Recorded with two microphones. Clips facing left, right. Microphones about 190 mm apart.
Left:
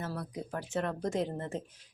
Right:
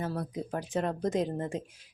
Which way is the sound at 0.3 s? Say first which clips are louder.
Right 1 dB; 20° right (ahead or behind).